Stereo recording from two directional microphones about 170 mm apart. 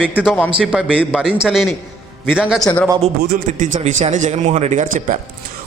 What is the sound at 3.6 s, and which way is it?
A man's voice, 45° right (ahead or behind).